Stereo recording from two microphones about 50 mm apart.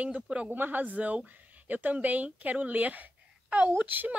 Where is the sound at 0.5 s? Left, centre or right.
Right.